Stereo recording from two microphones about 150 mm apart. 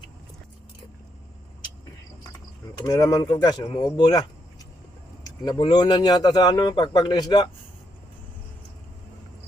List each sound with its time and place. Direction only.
2.8 s a man's voice: 25° left (ahead or behind)
5.2 s a man's voice: 30° left (ahead or behind)